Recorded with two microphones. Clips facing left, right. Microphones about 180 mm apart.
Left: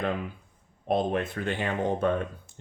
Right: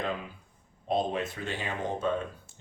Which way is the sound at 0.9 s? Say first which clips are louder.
Left 3 dB; 55° left (ahead or behind).